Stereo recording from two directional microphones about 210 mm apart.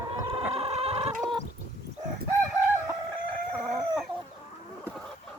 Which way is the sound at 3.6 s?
Centre (ahead or behind).